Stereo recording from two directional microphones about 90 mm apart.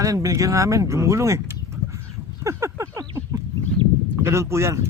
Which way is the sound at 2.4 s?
30° right (ahead or behind).